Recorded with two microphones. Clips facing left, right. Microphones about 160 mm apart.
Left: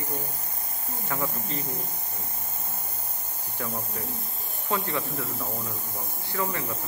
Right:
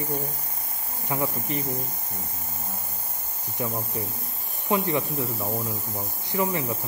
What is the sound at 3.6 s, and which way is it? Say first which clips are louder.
Speech: right 4 dB; 20° right (ahead or behind).